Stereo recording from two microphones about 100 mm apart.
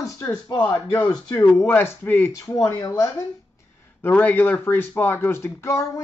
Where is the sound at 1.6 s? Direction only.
25° left (ahead or behind).